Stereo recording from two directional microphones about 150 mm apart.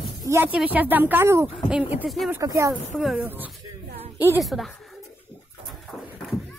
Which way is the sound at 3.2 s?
10° right (ahead or behind).